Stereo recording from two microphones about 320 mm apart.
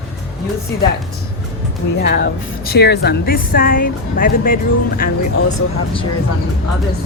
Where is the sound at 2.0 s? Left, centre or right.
Left.